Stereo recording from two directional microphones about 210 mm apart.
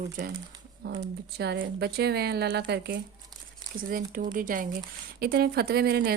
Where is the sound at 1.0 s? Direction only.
50° right (ahead or behind).